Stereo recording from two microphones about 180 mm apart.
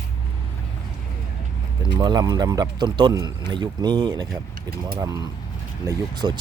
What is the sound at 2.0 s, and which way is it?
Speech, 25° right (ahead or behind).